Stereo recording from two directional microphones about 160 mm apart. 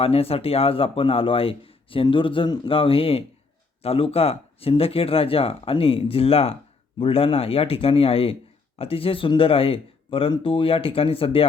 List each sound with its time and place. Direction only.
0.0 s speech: 40° left (ahead or behind)